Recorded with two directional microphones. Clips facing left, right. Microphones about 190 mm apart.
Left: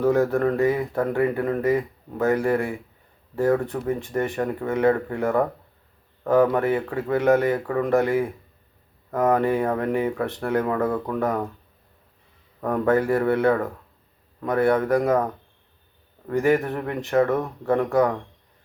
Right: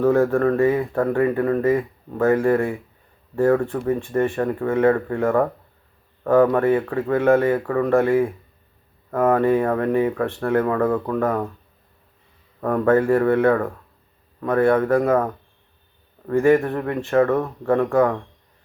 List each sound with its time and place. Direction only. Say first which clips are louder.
0.0 s speech: right 3 dB; 15° left (ahead or behind)
12.6 s speech: right 3 dB; 15° left (ahead or behind)
16.3 s speech: right 4 dB; 15° left (ahead or behind)